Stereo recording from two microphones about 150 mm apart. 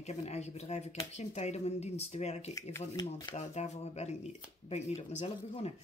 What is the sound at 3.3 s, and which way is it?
Speech, 45° left (ahead or behind).